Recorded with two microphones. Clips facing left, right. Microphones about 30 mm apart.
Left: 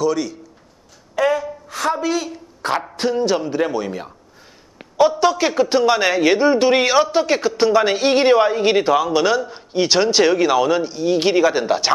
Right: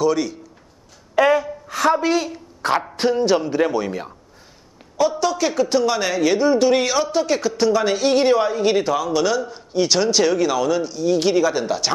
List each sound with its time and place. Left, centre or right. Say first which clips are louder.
0.0 s speech: right 1 dB; centre
1.1 s a sound: right 2 dB; centre
1.9 s a woman's voice: right 2 dB; centre
2.2 s speech: right 1 dB; centre
5.2 s speech: left 3 dB; centre